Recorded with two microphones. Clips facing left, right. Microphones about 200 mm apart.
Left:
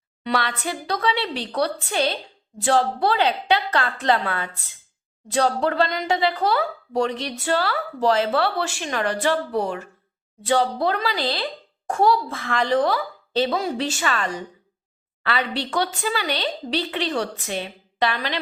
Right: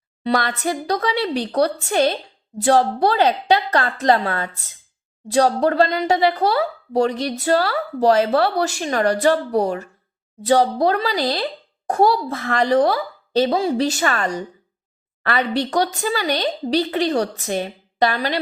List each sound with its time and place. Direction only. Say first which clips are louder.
0.3 s a woman's voice: right 4 dB; 40° right (ahead or behind)